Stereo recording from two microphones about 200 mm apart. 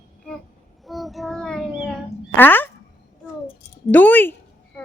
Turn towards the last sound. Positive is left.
turn(degrees=10)  # may be behind; listen again after turning